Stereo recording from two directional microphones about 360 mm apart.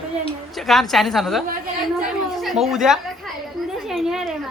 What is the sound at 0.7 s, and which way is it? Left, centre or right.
A woman's voice, centre.